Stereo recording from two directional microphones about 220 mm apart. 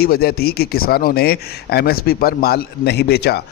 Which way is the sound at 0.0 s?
45° left (ahead or behind).